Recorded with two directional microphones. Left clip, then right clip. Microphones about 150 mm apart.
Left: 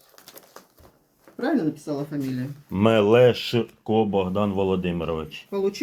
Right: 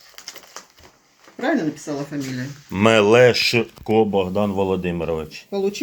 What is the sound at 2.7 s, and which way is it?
Speech, 15° left (ahead or behind).